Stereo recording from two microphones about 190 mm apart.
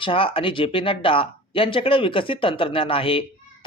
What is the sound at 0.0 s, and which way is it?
Speech, 25° left (ahead or behind).